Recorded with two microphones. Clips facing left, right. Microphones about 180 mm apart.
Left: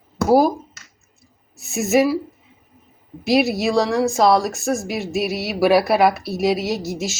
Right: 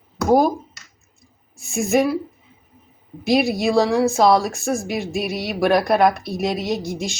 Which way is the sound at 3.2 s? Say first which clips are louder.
Even; centre (ahead or behind).